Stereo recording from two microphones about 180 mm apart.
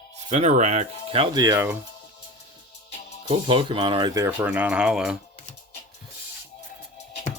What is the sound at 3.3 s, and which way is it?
Speech, 30° right (ahead or behind).